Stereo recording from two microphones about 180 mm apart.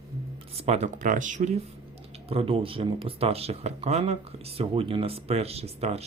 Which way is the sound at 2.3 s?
30° right (ahead or behind).